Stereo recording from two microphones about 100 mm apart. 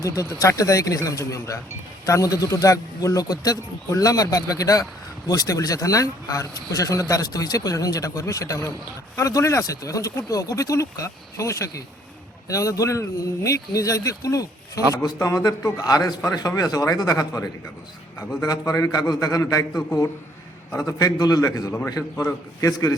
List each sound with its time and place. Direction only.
0.0 s speech: 30° left (ahead or behind)
22.7 s speech: 40° left (ahead or behind)